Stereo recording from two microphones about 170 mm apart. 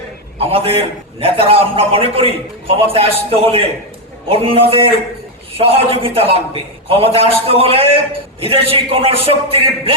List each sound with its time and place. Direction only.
0.3 s a man's voice: 35° right (ahead or behind)